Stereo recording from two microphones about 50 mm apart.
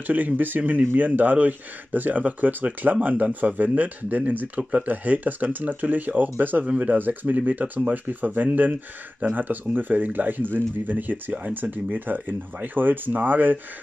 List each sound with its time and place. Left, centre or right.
0.0 s speech: right
4.6 s speech: right
6.6 s speech: right